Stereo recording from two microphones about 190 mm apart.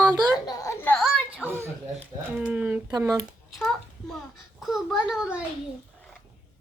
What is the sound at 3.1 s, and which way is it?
A child's voice, centre (ahead or behind).